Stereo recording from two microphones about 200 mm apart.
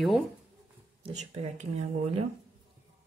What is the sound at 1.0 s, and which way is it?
Speech, 35° right (ahead or behind).